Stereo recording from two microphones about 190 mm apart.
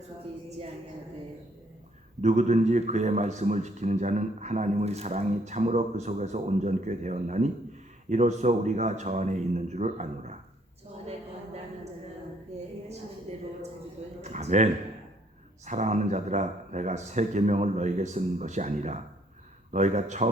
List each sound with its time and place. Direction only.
2.2 s a man's voice: 35° right (ahead or behind)
13.3 s a sound: 35° right (ahead or behind)
15.6 s a man's voice: 40° right (ahead or behind)